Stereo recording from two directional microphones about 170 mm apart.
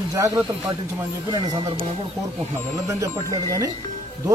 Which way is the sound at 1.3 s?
25° right (ahead or behind).